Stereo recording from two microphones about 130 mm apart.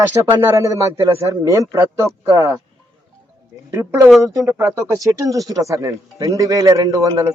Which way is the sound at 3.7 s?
20° right (ahead or behind).